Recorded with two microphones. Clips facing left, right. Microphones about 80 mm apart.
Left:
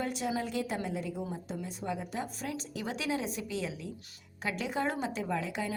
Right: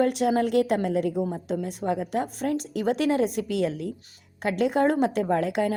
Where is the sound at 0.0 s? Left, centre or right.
Right.